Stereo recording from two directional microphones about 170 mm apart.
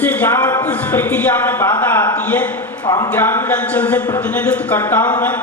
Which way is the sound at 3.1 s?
10° left (ahead or behind).